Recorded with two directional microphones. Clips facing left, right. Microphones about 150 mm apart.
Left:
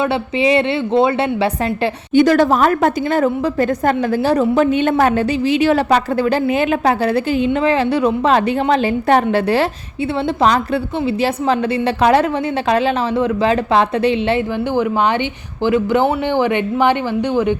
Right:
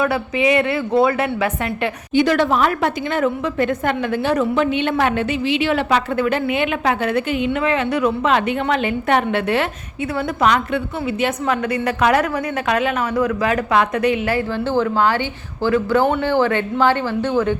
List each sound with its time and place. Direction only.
0.0 s a woman's voice: 30° left (ahead or behind)